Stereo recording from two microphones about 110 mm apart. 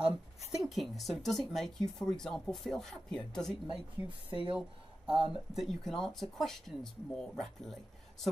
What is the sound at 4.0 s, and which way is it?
Speech, 60° left (ahead or behind).